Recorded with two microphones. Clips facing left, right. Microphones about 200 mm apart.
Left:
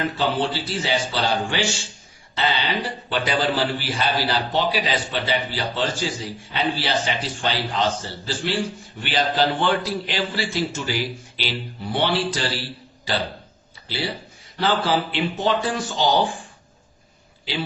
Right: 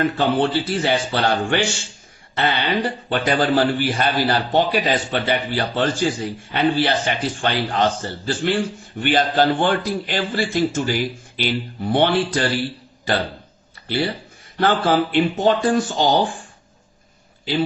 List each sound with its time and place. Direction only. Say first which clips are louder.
0.2 s a man's voice: right 5 dB; 55° right (ahead or behind)